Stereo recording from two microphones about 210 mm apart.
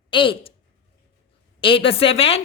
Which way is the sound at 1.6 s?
25° left (ahead or behind).